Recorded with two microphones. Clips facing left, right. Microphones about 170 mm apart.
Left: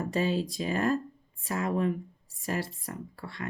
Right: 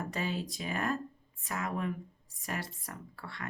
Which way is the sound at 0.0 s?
20° left (ahead or behind).